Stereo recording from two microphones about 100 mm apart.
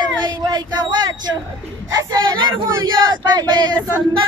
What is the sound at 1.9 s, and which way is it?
Speech, 40° right (ahead or behind).